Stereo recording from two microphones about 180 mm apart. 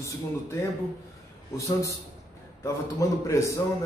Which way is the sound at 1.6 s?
15° left (ahead or behind).